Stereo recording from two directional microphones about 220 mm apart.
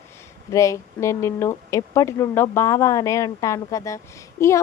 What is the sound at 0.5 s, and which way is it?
Speech, 15° left (ahead or behind).